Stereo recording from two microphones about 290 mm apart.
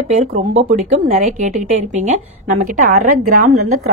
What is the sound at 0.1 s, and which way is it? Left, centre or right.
A woman's voice, right.